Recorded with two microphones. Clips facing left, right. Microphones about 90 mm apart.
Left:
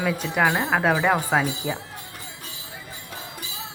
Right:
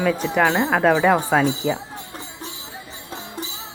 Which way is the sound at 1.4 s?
25° right (ahead or behind).